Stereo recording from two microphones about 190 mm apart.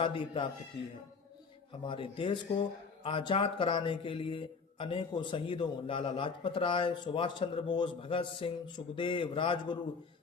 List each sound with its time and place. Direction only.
0.0 s speech: 25° left (ahead or behind)
1.8 s speech: 25° left (ahead or behind)